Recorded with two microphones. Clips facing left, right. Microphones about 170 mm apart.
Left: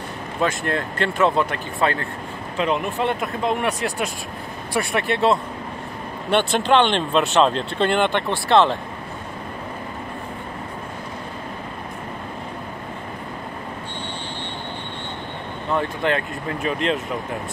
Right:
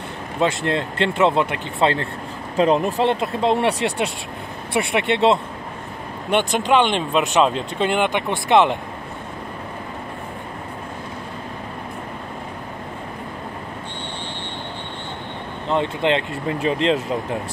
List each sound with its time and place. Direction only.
0.4 s speech: 20° right (ahead or behind)
2.5 s speech: 35° right (ahead or behind)
6.3 s speech: 10° right (ahead or behind)
15.7 s speech: 20° right (ahead or behind)